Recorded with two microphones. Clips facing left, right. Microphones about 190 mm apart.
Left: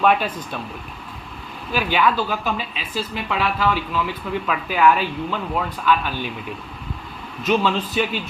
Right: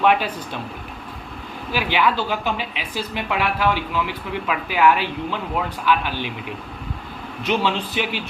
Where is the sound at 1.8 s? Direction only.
15° right (ahead or behind).